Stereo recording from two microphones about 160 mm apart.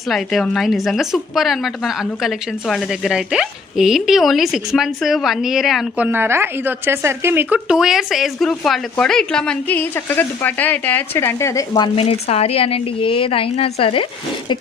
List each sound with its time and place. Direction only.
0.1 s a woman's voice: centre (ahead or behind)
6.1 s a woman's voice: 15° right (ahead or behind); by 11.9 s 20° left (ahead or behind)
11.9 s a woman's voice: 40° left (ahead or behind)